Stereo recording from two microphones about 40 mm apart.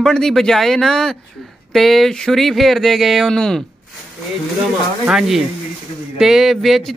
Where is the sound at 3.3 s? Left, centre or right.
Centre.